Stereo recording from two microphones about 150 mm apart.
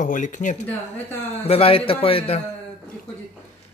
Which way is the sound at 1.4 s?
40° left (ahead or behind).